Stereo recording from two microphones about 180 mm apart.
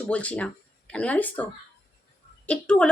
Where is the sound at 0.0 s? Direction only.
5° left (ahead or behind).